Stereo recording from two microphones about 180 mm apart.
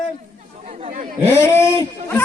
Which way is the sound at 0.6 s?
40° right (ahead or behind).